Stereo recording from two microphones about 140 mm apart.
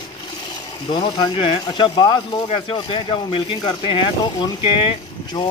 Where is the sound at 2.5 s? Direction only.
40° left (ahead or behind).